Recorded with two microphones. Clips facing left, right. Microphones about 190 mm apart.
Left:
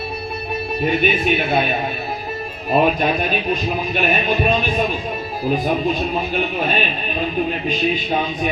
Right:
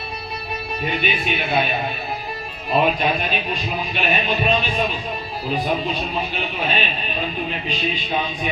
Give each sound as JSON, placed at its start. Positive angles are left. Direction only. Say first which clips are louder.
{"t": 0.9, "sound": "speech", "louder": "left 6 dB", "side_deg": 50}
{"t": 2.7, "sound": "speech", "louder": "left 3 dB", "side_deg": 45}
{"t": 5.5, "sound": "speech", "louder": "left 4 dB", "side_deg": 45}